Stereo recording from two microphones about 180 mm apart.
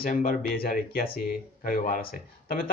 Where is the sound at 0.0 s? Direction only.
50° left (ahead or behind).